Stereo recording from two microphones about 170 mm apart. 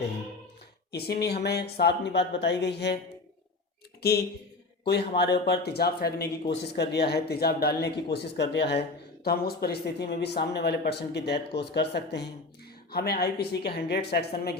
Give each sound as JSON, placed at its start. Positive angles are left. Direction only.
{"t": 0.9, "sound": "speech", "side_deg": 70}
{"t": 4.9, "sound": "speech", "side_deg": 75}
{"t": 6.5, "sound": "speech", "side_deg": 80}
{"t": 9.2, "sound": "speech", "side_deg": 65}
{"t": 12.9, "sound": "speech", "side_deg": 65}